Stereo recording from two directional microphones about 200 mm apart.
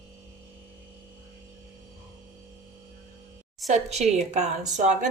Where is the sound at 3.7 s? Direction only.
35° right (ahead or behind).